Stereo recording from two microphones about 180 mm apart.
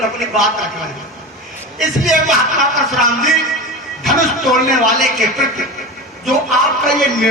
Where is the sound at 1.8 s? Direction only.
Centre (ahead or behind).